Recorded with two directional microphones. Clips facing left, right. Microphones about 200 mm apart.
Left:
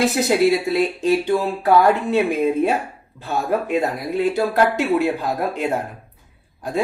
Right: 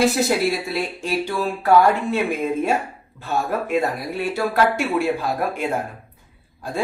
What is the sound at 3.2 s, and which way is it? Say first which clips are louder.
A man's voice: left 2 dB; 15° left (ahead or behind).